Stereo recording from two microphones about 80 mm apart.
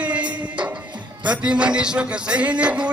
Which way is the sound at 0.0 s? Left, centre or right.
Centre.